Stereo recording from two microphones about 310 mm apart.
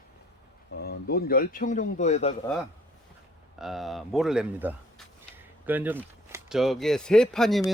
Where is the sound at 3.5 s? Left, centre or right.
Centre.